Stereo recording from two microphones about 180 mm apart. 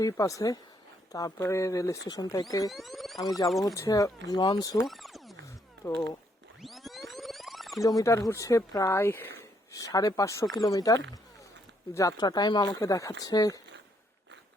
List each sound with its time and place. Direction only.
0.0 s speech: 20° left (ahead or behind)
2.6 s speech: centre (ahead or behind)
3.2 s speech: 20° left (ahead or behind)
4.8 s a sound: centre (ahead or behind)
5.8 s speech: 15° left (ahead or behind)
6.6 s pulse: centre (ahead or behind)
7.8 s speech: 20° left (ahead or behind)